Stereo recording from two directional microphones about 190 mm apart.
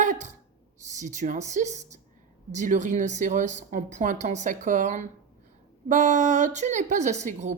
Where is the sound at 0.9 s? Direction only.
40° right (ahead or behind).